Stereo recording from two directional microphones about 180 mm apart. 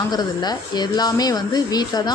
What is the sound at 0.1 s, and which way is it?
Speech, 20° left (ahead or behind).